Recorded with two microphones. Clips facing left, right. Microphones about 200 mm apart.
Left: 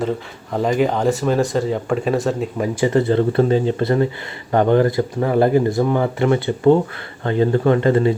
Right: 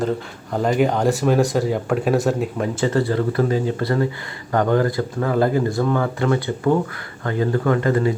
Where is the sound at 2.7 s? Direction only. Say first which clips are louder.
Left 4 dB; 15° left (ahead or behind).